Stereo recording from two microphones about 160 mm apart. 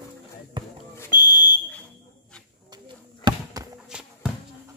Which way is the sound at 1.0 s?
25° left (ahead or behind).